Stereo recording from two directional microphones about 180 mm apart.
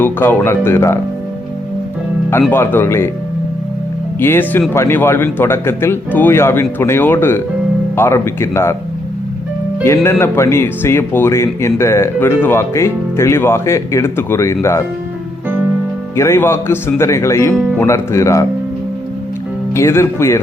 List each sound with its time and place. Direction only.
0.0 s speech: 10° left (ahead or behind)
2.5 s speech: 10° left (ahead or behind)
4.2 s speech: 10° left (ahead or behind)
9.8 s speech: 15° left (ahead or behind)
16.1 s speech: 15° left (ahead or behind)
17.5 s speech: centre (ahead or behind)
17.7 s speech: 15° left (ahead or behind)
19.7 s speech: 15° left (ahead or behind)